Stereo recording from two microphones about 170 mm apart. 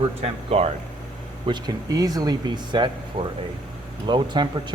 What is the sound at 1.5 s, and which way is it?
Speech, 25° right (ahead or behind).